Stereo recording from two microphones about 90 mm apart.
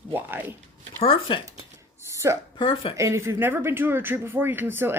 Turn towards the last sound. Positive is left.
turn(degrees=-25)  # may be behind; listen again after turning